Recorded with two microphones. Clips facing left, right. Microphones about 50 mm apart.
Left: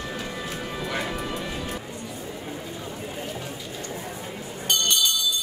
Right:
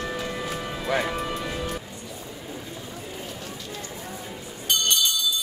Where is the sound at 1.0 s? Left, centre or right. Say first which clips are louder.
Right 2 dB; centre.